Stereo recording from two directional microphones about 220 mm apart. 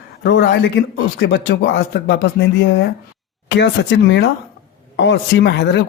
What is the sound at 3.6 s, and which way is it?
A woman's voice, 50° left (ahead or behind).